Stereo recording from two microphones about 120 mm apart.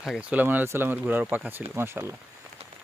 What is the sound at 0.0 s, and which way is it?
Speech, 5° right (ahead or behind).